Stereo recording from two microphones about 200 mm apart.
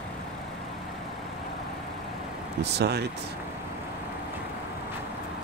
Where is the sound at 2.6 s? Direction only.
55° right (ahead or behind).